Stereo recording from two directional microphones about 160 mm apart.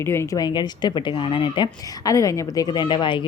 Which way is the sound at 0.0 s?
15° left (ahead or behind).